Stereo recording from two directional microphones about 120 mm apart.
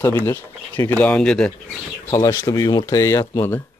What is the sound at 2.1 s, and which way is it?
Speech, 25° left (ahead or behind).